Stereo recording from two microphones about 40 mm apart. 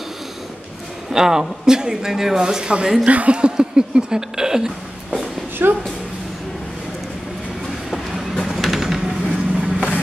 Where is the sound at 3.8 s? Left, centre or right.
Centre.